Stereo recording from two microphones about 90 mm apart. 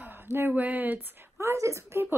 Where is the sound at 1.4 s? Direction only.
35° right (ahead or behind).